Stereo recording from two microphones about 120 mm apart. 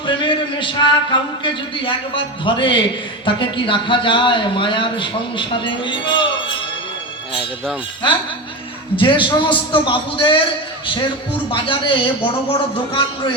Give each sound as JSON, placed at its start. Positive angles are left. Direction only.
{"t": 0.0, "sound": "a man's voice", "side_deg": 40}
{"t": 7.3, "sound": "speech", "side_deg": 0}
{"t": 9.0, "sound": "a man's voice", "side_deg": 45}